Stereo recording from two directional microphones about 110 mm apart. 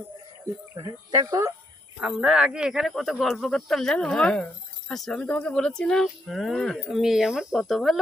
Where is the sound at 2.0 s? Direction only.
10° right (ahead or behind).